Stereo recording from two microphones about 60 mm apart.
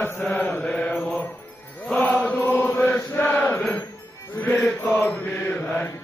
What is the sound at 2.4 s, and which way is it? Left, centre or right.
Mantra, left.